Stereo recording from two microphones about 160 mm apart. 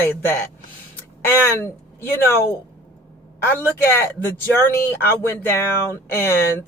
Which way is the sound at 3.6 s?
15° left (ahead or behind).